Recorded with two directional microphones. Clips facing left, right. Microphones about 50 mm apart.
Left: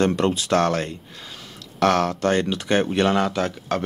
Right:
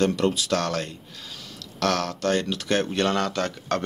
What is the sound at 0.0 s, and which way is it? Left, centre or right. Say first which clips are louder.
Speech: left 2 dB; left.